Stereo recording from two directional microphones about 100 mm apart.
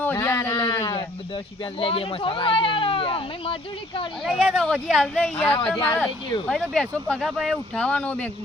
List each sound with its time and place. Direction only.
0.2 s a sound: 30° left (ahead or behind)
1.8 s speech: 65° left (ahead or behind)
4.3 s speech: 5° left (ahead or behind)
7.2 s speech: centre (ahead or behind)
7.8 s speech: 10° left (ahead or behind)